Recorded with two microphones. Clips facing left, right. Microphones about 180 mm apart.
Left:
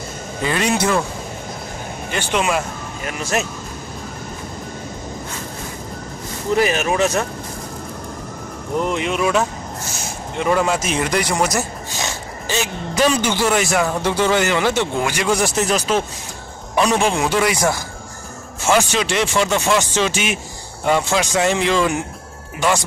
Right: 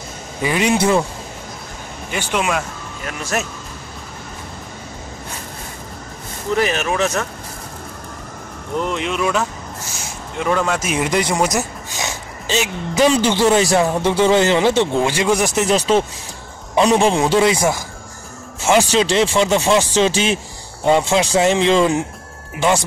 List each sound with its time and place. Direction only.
0.4 s a man's voice: 15° right (ahead or behind)
2.1 s speech: centre (ahead or behind)
6.5 s speech: 5° left (ahead or behind)
8.7 s speech: 5° left (ahead or behind)
10.4 s speech: 5° left (ahead or behind)
10.8 s a man's voice: 10° right (ahead or behind)
11.1 s a sound: 20° right (ahead or behind)
12.9 s speech: 20° right (ahead or behind)
18.9 s speech: 30° right (ahead or behind)